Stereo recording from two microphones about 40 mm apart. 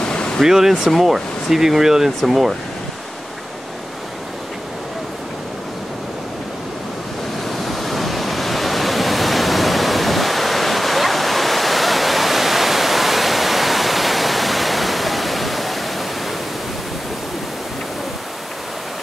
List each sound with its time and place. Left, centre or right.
0.0 s waterfall: left
0.4 s speech: centre
7.4 s waves: centre